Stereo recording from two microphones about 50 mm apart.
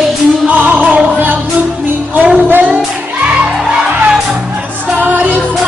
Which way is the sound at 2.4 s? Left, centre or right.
Right.